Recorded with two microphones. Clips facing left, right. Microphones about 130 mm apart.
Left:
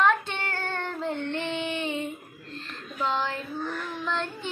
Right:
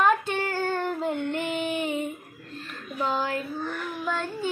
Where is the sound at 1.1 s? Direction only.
25° left (ahead or behind).